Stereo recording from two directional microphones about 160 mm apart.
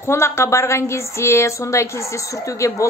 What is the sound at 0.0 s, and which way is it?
A woman's voice, 15° left (ahead or behind).